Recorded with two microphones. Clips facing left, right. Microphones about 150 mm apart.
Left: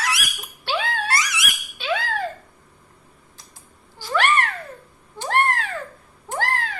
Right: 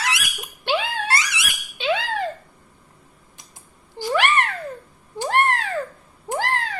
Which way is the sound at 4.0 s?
15° right (ahead or behind).